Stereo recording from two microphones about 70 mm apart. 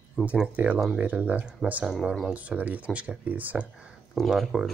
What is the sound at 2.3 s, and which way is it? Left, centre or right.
Speech, right.